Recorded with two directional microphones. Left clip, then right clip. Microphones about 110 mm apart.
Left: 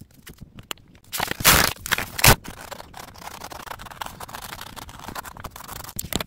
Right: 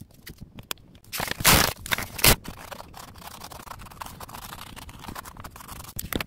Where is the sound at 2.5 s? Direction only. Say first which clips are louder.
Left 3 dB; 35° left (ahead or behind).